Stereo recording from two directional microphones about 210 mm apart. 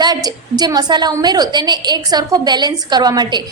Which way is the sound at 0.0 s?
20° right (ahead or behind).